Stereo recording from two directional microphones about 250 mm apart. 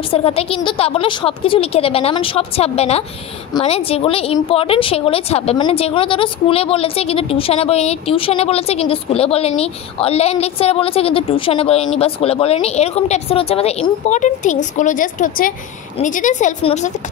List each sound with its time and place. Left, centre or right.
0.1 s speech: left